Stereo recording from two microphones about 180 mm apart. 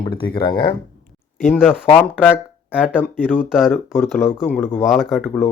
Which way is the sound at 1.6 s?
5° right (ahead or behind).